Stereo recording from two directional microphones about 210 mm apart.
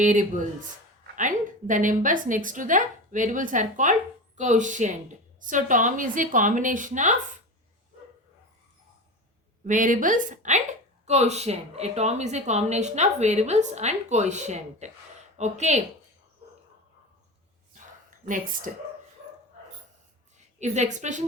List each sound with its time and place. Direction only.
0.0 s a woman's voice: 35° right (ahead or behind)
9.6 s a woman's voice: 40° right (ahead or behind)
18.3 s a woman's voice: 40° right (ahead or behind)
20.6 s a woman's voice: 35° right (ahead or behind)